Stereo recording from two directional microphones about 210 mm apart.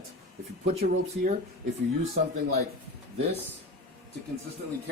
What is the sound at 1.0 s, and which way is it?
Speech, 35° right (ahead or behind).